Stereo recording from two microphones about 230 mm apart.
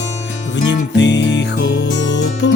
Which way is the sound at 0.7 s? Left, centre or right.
Left.